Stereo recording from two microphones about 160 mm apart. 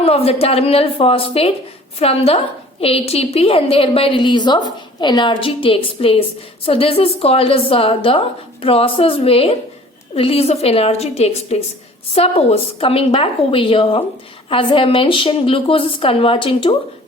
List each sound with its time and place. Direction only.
0.0 s a woman's voice: 40° left (ahead or behind)